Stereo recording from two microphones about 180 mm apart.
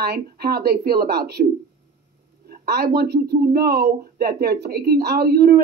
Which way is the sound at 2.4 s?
60° right (ahead or behind).